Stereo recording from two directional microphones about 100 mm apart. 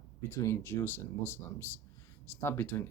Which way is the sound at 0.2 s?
25° left (ahead or behind).